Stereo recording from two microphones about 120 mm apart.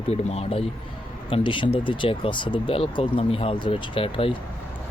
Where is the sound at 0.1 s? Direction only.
60° left (ahead or behind).